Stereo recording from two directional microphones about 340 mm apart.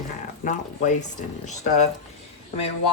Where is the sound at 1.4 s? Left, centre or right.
Left.